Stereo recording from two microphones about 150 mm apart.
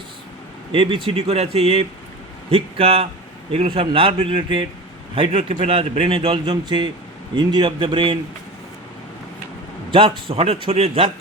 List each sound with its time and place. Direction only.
0.7 s a man's voice: 35° right (ahead or behind)
9.9 s a man's voice: 35° right (ahead or behind)